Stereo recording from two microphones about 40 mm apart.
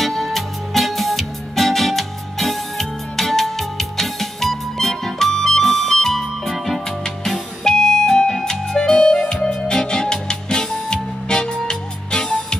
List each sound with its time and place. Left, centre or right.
0.0 s music: centre
7.6 s music: centre